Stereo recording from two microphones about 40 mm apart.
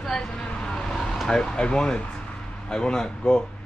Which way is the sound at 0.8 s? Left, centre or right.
Centre.